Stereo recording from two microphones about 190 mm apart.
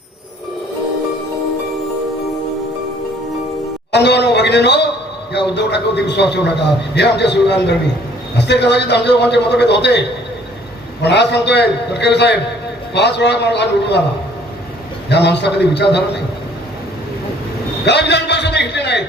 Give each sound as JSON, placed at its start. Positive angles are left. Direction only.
{"t": 3.9, "sound": "a man's voice", "side_deg": 65}
{"t": 11.0, "sound": "a man's voice", "side_deg": 65}
{"t": 15.1, "sound": "a man's voice", "side_deg": 65}
{"t": 17.8, "sound": "a sound", "side_deg": 60}